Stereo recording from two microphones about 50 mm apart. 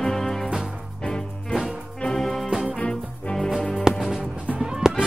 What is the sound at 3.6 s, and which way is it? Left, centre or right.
Music, centre.